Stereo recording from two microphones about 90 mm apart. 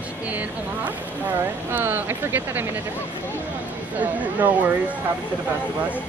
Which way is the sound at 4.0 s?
15° right (ahead or behind).